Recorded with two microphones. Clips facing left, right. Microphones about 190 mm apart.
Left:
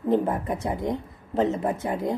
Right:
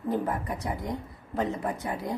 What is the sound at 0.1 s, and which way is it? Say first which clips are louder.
A woman's voice: left 6 dB; 25° left (ahead or behind).